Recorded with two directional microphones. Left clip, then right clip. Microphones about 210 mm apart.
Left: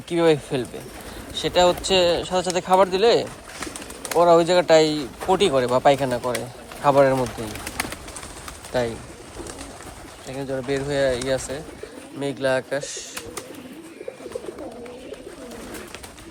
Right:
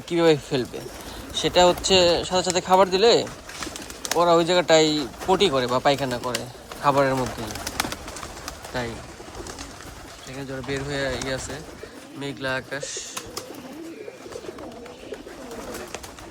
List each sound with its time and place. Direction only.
0.1 s speech: 15° right (ahead or behind)
8.7 s speech: 10° right (ahead or behind)
10.3 s speech: centre (ahead or behind)